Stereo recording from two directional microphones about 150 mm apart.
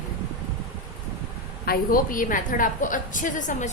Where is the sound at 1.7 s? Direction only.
70° left (ahead or behind).